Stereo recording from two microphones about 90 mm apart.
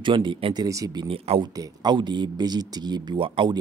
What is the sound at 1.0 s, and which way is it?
Speech, 80° right.